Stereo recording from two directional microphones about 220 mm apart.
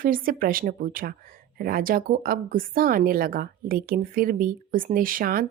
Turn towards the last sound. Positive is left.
turn(degrees=-40)  # may be behind; listen again after turning